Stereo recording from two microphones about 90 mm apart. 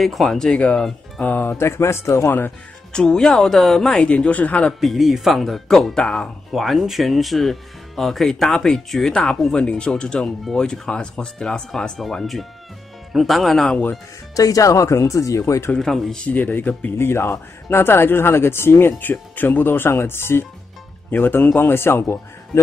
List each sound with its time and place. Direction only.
0.0 s speech: centre (ahead or behind); by 2.5 s 25° left (ahead or behind)
2.9 s speech: 10° left (ahead or behind)
4.7 s speech: centre (ahead or behind)
14.3 s speech: 40° left (ahead or behind)
15.7 s speech: 5° left (ahead or behind)
16.3 s speech: 20° left (ahead or behind)